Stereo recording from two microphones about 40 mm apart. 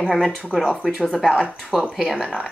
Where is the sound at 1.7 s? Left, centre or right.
Centre.